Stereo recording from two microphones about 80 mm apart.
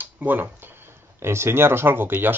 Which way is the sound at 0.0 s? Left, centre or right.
Right.